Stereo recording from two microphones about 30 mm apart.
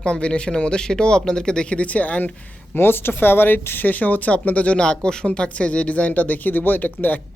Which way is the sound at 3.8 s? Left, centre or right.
Left.